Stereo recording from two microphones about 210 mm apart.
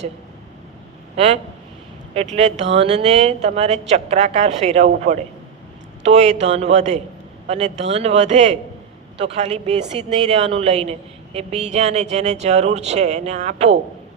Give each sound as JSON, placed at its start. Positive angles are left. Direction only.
{"t": 1.1, "sound": "speech", "side_deg": -30}
{"t": 2.7, "sound": "speech", "side_deg": -30}